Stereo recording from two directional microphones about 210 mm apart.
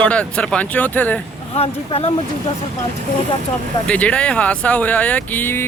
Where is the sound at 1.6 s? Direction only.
30° left (ahead or behind).